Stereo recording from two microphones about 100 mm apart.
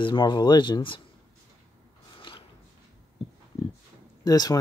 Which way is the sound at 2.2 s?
55° left (ahead or behind).